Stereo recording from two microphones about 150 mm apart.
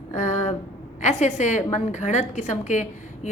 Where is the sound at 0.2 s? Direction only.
50° left (ahead or behind).